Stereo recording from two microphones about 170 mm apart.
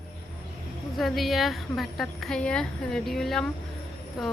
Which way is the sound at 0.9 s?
Centre (ahead or behind).